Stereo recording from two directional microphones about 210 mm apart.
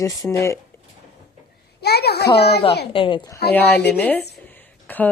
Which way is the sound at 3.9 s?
10° left (ahead or behind).